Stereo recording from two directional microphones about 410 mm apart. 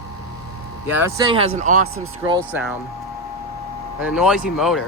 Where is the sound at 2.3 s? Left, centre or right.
Centre.